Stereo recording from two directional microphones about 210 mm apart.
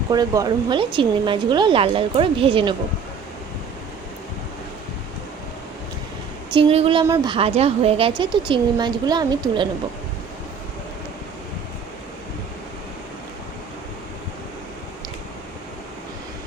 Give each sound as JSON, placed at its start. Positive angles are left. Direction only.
{"t": 0.1, "sound": "speech", "side_deg": -20}
{"t": 6.5, "sound": "speech", "side_deg": -25}
{"t": 7.0, "sound": "speech", "side_deg": -10}
{"t": 7.3, "sound": "speech", "side_deg": -30}